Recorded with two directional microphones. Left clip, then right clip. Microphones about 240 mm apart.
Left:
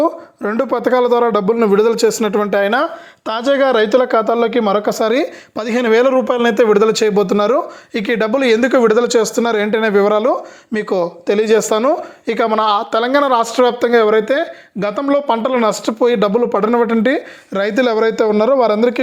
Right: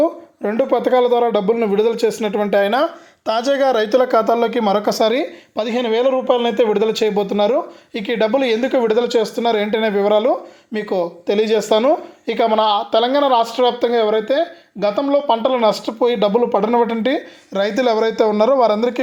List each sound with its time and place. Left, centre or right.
0.0 s a man's voice: centre